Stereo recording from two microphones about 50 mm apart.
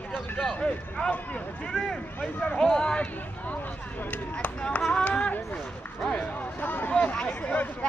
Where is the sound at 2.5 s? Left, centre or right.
Centre.